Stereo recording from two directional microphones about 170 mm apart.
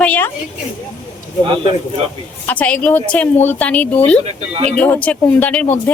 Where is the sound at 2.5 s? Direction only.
10° left (ahead or behind).